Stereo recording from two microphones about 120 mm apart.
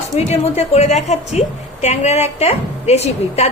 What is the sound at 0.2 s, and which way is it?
A woman's voice, 60° left (ahead or behind).